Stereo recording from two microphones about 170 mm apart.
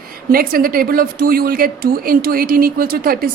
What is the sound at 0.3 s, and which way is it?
A woman's voice, 60° right (ahead or behind).